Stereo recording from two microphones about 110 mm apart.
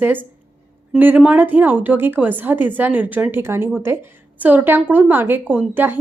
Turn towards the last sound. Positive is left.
turn(degrees=-20)  # may be behind; listen again after turning